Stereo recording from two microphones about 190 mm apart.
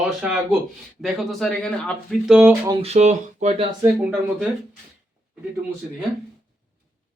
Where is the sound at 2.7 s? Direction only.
30° right (ahead or behind).